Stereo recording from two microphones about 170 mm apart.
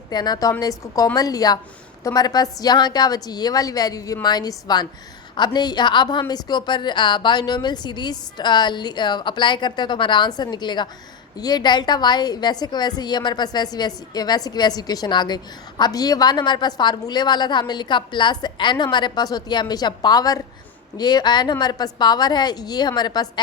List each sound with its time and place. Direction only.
0.1 s a woman's voice: 25° left (ahead or behind)